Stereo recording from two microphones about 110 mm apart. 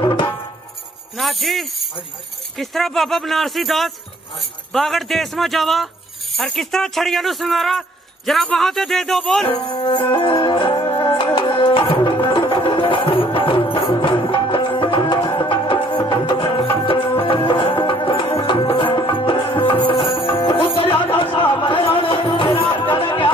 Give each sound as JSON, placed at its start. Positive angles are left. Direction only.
{"t": 0.0, "sound": "music", "side_deg": 45}
{"t": 1.1, "sound": "speech", "side_deg": 0}
{"t": 9.7, "sound": "music", "side_deg": 45}